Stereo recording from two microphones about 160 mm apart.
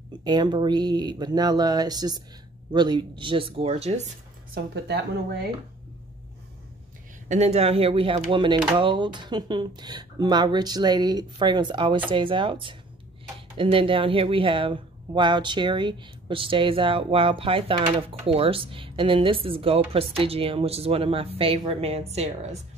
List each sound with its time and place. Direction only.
0.2 s speech: 25° right (ahead or behind)
4.7 s speech: 90° right
7.2 s speech: 45° right (ahead or behind)